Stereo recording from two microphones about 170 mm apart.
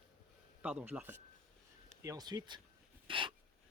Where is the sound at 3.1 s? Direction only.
30° right (ahead or behind).